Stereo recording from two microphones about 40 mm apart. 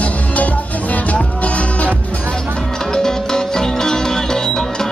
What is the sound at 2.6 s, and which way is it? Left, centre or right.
Music, centre.